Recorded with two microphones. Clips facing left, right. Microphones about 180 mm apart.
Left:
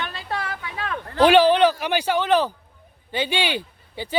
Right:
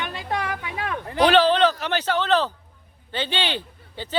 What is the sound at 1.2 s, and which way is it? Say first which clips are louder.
A man's voice: left 2 dB; 10° left (ahead or behind).